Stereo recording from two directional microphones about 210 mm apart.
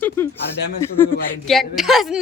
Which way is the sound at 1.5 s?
Centre (ahead or behind).